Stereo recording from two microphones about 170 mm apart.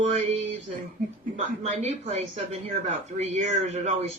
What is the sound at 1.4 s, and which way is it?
Speech, 40° right (ahead or behind).